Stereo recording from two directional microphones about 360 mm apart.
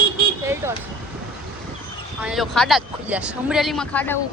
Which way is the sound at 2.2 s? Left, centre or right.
Centre.